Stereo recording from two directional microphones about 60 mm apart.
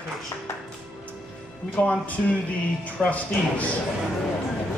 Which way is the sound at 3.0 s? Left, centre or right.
Left.